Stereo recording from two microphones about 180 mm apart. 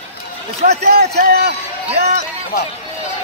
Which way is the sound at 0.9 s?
60° right (ahead or behind).